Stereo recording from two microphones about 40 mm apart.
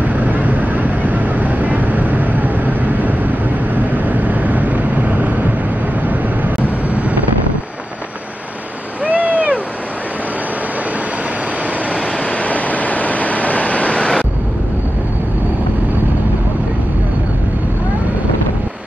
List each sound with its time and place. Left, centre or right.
0.0 s vehicle: right
9.0 s vehicle: right
11.9 s vehicle: left